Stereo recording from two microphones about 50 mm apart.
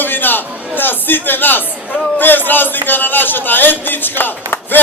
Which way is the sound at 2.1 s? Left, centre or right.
Left.